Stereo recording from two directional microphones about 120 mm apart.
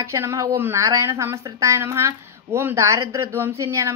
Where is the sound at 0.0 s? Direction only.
20° right (ahead or behind).